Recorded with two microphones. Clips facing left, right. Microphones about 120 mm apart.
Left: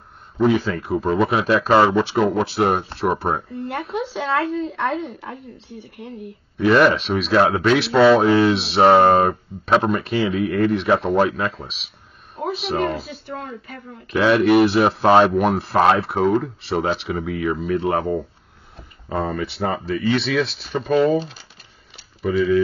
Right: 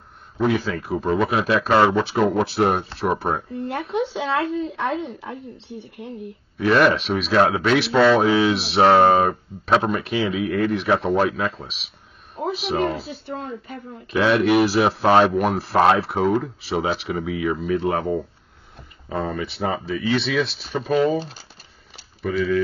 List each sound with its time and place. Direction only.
0.4 s speech: centre (ahead or behind)
4.6 s speech: 20° right (ahead or behind)
6.6 s speech: centre (ahead or behind)
14.1 s speech: centre (ahead or behind)
22.2 s speech: centre (ahead or behind)